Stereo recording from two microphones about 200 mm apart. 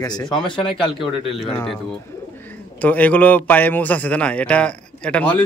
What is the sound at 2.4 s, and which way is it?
A man's voice, 10° left (ahead or behind).